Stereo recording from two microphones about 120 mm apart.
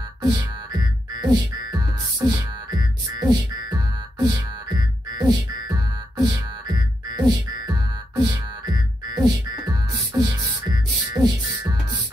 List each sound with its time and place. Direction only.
0.2 s music: 35° right (ahead or behind)